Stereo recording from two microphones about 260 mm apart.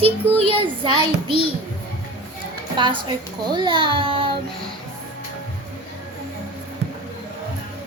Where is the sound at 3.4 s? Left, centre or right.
Centre.